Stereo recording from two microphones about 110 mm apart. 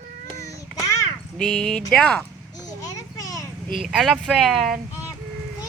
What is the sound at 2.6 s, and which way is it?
Children playing, 35° left (ahead or behind).